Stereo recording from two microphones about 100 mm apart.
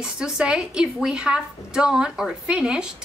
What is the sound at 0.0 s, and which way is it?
A woman's voice, 10° right (ahead or behind).